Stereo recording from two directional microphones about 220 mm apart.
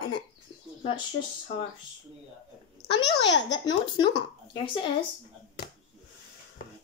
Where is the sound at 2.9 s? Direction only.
50° left (ahead or behind).